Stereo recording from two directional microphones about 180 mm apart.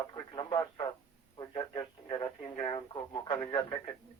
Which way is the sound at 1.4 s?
25° left (ahead or behind).